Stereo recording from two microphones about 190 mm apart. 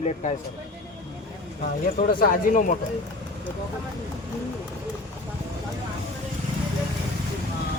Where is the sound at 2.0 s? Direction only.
50° left (ahead or behind).